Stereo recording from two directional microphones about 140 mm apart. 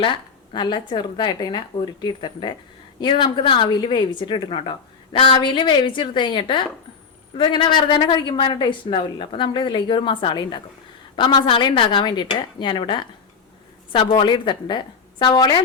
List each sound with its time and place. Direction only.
0.0 s a woman's voice: 35° left (ahead or behind)